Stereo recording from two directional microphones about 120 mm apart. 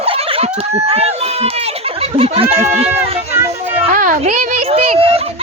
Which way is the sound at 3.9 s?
90° right.